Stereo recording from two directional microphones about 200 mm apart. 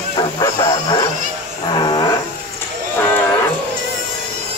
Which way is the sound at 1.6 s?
20° left (ahead or behind).